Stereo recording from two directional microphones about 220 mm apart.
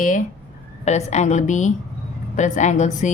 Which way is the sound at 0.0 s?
35° left (ahead or behind).